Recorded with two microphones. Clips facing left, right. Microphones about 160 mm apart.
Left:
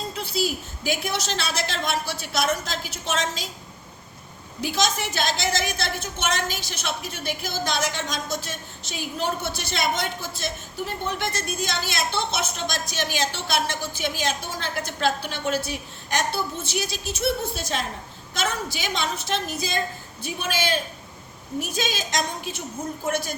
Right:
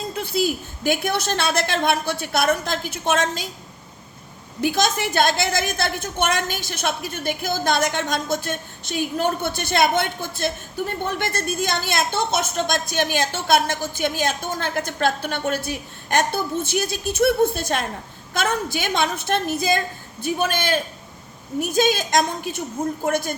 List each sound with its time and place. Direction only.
0.2 s a woman's voice: 55° right (ahead or behind)
4.6 s a woman's voice: 55° right (ahead or behind)